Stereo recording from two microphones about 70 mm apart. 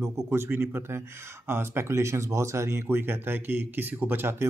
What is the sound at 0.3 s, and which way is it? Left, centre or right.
Speech, right.